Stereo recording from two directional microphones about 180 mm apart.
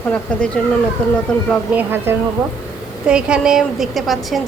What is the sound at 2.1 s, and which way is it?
A woman's voice, 15° right (ahead or behind).